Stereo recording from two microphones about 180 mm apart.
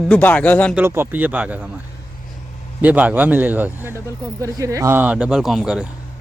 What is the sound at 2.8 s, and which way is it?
Speech, 10° right (ahead or behind).